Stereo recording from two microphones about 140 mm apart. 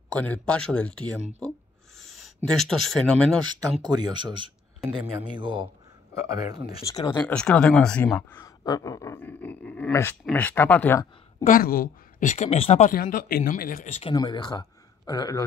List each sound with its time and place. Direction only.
0.1 s speech: 10° left (ahead or behind)
3.8 s speech: 30° right (ahead or behind)
6.9 s speech: 25° left (ahead or behind)
7.2 s speech: 10° left (ahead or behind)
8.5 s speech: 25° left (ahead or behind)
11.4 s a woman's voice: 85° left; by 12.9 s 50° left (ahead or behind)
12.9 s speech: 90° left
13.8 s speech: 50° left (ahead or behind)
14.1 s speech: 30° left (ahead or behind)